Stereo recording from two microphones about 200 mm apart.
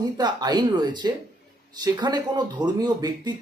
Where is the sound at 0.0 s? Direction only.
20° right (ahead or behind).